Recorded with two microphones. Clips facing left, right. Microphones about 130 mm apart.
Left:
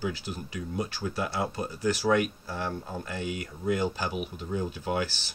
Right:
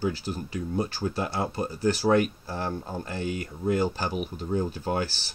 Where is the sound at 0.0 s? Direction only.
35° right (ahead or behind).